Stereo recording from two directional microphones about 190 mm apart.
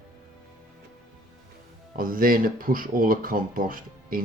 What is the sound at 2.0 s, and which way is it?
Speech, 50° right (ahead or behind).